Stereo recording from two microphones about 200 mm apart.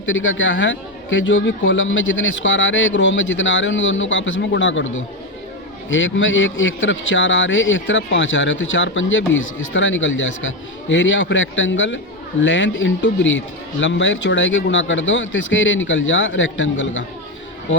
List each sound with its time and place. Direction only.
0.0 s a man's voice: 80° left